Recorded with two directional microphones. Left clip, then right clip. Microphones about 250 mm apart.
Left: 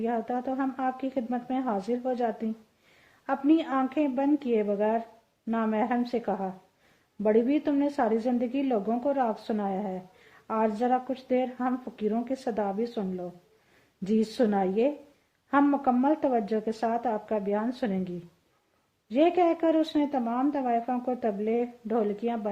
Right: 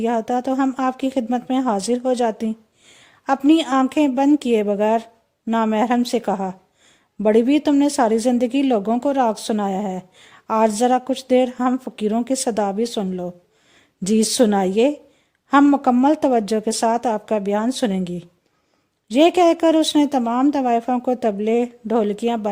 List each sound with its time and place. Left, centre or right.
0.0 s a woman's voice: right